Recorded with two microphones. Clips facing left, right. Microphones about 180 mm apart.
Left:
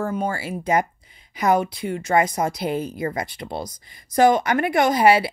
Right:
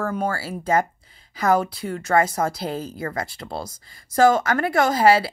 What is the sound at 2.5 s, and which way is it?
Speech, 30° right (ahead or behind).